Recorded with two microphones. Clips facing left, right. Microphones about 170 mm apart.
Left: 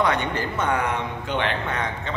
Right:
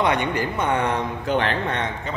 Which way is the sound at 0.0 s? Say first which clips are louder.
Right 2 dB; 15° right (ahead or behind).